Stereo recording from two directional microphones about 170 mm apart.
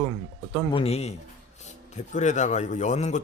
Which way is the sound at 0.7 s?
35° left (ahead or behind).